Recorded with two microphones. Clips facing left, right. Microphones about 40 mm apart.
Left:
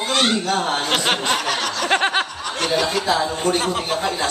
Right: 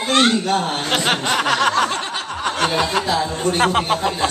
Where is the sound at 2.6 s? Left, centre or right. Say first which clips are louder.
Even; right.